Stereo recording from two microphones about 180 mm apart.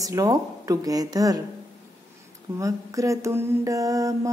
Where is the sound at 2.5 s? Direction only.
20° right (ahead or behind).